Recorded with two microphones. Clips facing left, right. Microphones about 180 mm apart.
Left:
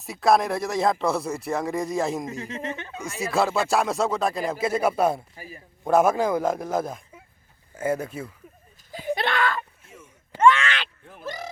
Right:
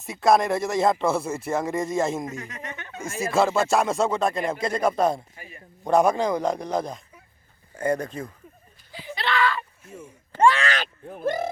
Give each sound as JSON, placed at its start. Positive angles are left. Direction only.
{"t": 0.0, "sound": "speech", "side_deg": 0}
{"t": 2.2, "sound": "speech", "side_deg": 25}
{"t": 3.0, "sound": "speech", "side_deg": 0}
{"t": 8.9, "sound": "a sound", "side_deg": 50}
{"t": 9.9, "sound": "a sound", "side_deg": -30}
{"t": 11.2, "sound": "speech", "side_deg": -55}